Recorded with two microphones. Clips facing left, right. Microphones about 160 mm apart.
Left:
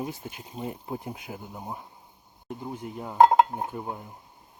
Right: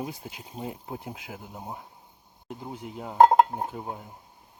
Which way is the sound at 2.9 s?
25° right (ahead or behind).